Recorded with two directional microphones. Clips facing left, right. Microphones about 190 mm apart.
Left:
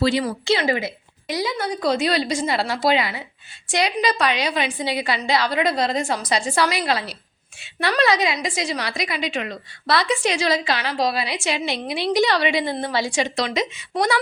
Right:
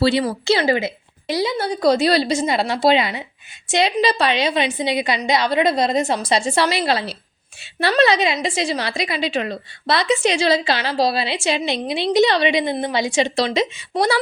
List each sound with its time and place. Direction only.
0.0 s a woman's voice: 30° right (ahead or behind)